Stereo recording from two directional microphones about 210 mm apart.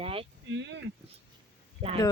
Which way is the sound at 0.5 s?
55° right (ahead or behind).